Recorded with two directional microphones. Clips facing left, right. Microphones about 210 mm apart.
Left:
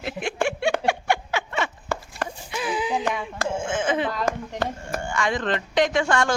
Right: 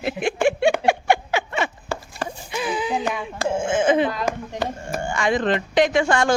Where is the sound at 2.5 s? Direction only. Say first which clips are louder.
Right 2 dB; 5° left (ahead or behind).